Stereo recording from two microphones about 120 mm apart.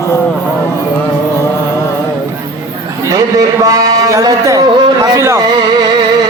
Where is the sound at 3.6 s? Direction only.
30° right (ahead or behind).